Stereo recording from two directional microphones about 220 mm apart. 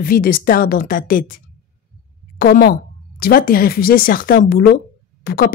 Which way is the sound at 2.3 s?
45° left (ahead or behind).